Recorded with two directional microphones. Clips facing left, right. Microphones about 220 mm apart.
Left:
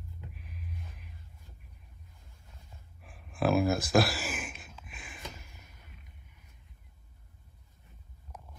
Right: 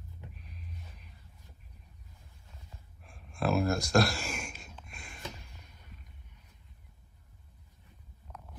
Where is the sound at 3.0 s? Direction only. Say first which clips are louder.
Left 3 dB; 5° left (ahead or behind).